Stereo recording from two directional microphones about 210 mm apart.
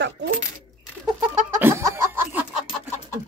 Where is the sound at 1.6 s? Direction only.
10° right (ahead or behind).